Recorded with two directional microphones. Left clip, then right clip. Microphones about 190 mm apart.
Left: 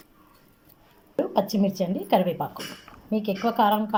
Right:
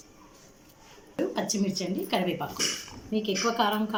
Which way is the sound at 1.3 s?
60° left (ahead or behind).